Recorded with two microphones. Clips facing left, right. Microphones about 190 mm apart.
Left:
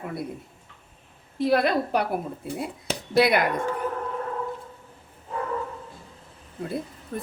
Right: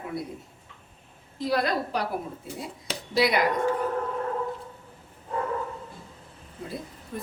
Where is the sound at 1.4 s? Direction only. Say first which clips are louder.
Left 4 dB; 60° left (ahead or behind).